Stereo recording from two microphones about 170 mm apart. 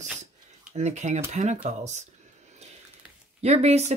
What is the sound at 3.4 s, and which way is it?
Speech, 40° right (ahead or behind).